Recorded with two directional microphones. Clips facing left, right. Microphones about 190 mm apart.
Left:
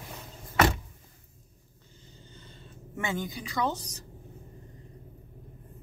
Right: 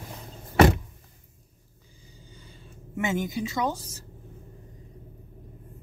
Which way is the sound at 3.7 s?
5° right (ahead or behind).